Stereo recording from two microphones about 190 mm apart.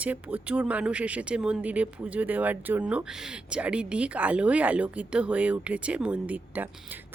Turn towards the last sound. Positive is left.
turn(degrees=-10)  # may be behind; listen again after turning